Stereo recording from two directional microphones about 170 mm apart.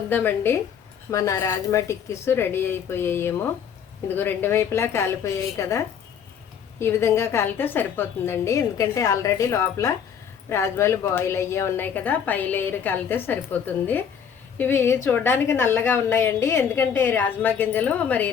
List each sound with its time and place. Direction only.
0.1 s a woman's voice: 10° left (ahead or behind)